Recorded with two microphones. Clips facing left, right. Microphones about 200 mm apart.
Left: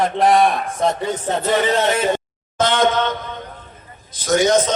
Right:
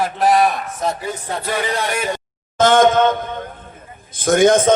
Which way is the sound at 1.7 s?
25° left (ahead or behind).